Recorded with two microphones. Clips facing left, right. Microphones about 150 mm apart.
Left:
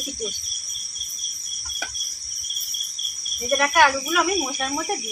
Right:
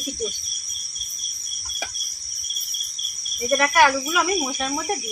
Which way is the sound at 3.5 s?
Centre (ahead or behind).